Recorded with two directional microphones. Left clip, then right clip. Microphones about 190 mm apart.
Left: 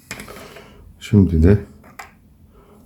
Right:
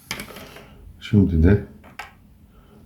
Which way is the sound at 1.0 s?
55° left (ahead or behind).